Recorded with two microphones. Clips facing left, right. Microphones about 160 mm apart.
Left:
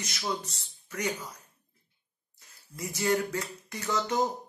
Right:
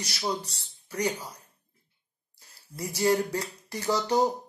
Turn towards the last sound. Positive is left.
turn(degrees=-35)  # may be behind; listen again after turning